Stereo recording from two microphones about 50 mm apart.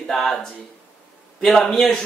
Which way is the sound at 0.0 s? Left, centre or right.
Centre.